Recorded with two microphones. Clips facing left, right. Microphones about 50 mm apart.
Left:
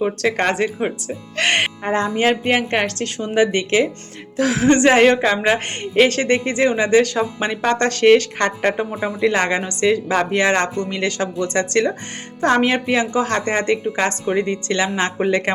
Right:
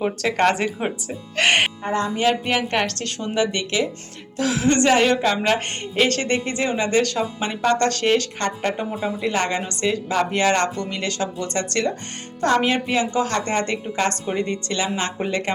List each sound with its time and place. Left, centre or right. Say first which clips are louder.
0.0 s speech: left 1 dB; centre
1.8 s a woman's voice: left 3 dB; left
4.4 s speech: left 4 dB; left
4.6 s a woman's voice: left 5 dB; left